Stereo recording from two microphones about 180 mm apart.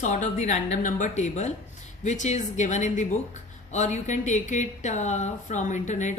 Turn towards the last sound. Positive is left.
turn(degrees=40)  # may be behind; listen again after turning